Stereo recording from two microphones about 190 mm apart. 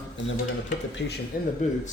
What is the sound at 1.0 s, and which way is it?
Speech, 65° left (ahead or behind).